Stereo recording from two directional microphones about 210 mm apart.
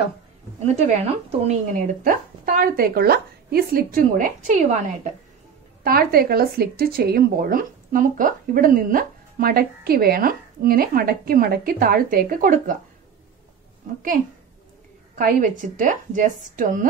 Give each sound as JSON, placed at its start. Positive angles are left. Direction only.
{"t": 0.7, "sound": "speech", "side_deg": -35}
{"t": 5.9, "sound": "speech", "side_deg": -45}
{"t": 15.1, "sound": "speech", "side_deg": -40}